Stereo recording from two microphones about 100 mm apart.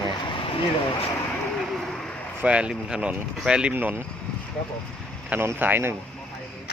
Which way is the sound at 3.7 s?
20° right (ahead or behind).